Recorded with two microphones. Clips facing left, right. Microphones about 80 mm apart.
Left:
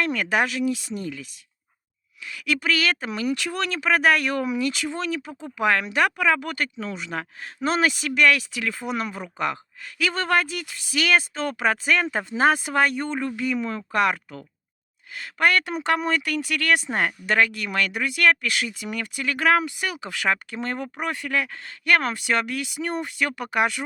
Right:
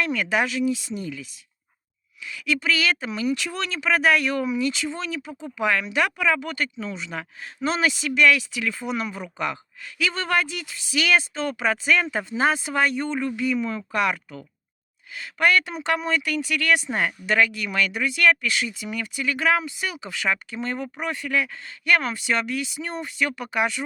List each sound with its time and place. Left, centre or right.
0.0 s speech: left